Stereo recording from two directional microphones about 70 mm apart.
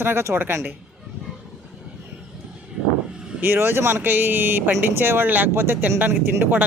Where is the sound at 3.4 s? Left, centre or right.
Right.